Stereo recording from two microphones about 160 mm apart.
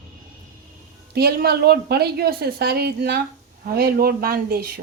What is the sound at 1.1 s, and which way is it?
A woman's voice, 75° right (ahead or behind).